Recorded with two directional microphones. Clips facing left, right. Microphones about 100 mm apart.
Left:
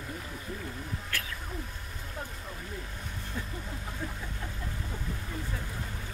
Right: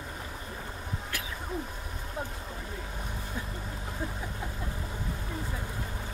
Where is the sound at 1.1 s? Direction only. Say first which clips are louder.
Left 2 dB; 15° right (ahead or behind).